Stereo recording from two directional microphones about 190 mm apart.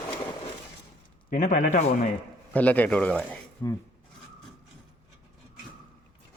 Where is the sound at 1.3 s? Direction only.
40° left (ahead or behind).